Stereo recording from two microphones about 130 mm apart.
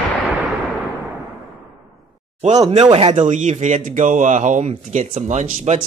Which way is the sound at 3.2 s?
70° right (ahead or behind).